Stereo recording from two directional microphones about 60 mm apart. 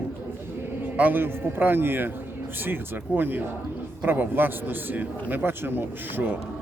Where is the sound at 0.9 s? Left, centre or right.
Right.